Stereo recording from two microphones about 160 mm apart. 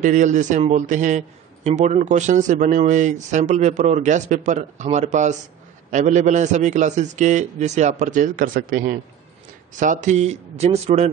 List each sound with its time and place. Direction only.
0.0 s a man's voice: 50° right (ahead or behind)
9.8 s a man's voice: 50° right (ahead or behind)